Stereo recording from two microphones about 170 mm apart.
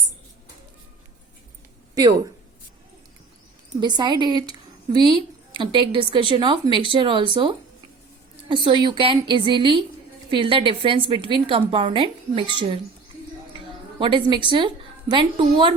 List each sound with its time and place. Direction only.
3.8 s a woman's voice: 25° right (ahead or behind)
14.0 s a woman's voice: 30° right (ahead or behind)